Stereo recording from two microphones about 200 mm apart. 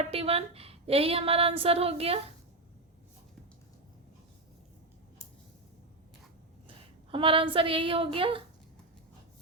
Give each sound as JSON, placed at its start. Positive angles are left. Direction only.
{"t": 0.0, "sound": "a woman's voice", "side_deg": -30}
{"t": 6.7, "sound": "a woman's voice", "side_deg": -25}